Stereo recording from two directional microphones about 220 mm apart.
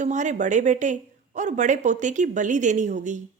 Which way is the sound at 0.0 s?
35° right (ahead or behind).